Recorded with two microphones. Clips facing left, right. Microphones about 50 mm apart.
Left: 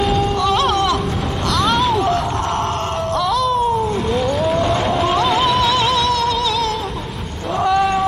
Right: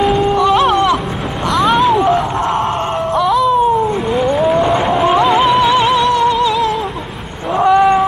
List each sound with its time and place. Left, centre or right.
0.0 s music: centre
1.5 s a sound: centre
3.2 s cat: centre
4.1 s music: centre
7.5 s cat: centre